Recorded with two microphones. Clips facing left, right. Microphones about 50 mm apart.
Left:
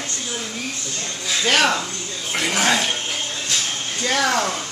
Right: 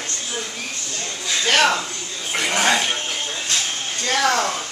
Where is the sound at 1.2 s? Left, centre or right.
Centre.